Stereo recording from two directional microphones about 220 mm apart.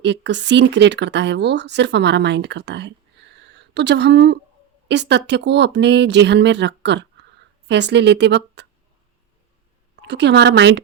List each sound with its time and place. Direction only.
0.0 s speech: 50° right (ahead or behind)
9.9 s a woman's voice: 50° right (ahead or behind)